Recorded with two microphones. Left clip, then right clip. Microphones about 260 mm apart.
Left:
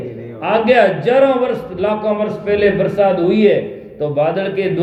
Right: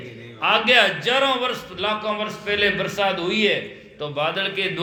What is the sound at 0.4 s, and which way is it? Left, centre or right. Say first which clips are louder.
A man's voice: left 5 dB; centre.